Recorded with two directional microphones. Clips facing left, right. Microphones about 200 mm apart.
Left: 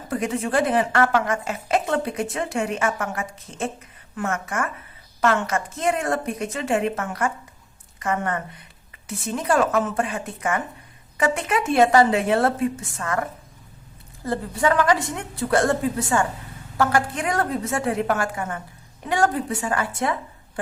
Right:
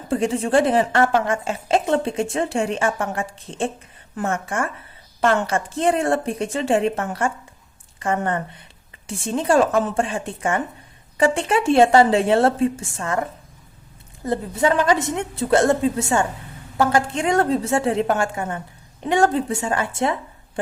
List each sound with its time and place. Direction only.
0.1 s a woman's voice: 30° right (ahead or behind)
14.3 s a woman's voice: 25° right (ahead or behind)